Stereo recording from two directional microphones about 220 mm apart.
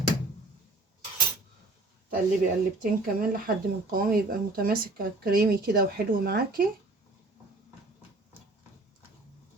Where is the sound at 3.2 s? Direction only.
40° right (ahead or behind).